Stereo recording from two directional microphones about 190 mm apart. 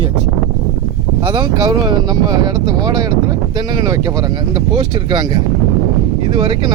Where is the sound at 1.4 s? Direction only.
20° right (ahead or behind).